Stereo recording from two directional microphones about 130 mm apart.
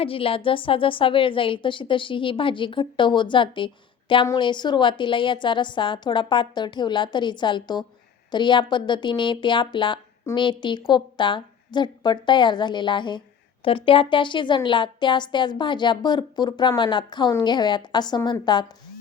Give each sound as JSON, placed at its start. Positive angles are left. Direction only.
{"t": 0.0, "sound": "a woman's voice", "side_deg": 45}